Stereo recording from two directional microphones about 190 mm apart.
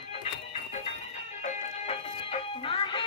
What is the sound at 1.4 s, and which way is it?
Music, 30° left (ahead or behind).